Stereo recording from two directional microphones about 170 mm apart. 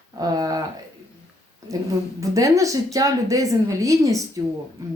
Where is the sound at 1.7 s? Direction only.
20° right (ahead or behind).